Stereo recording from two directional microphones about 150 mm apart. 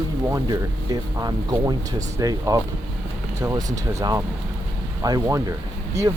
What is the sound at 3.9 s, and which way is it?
Speech, 25° right (ahead or behind).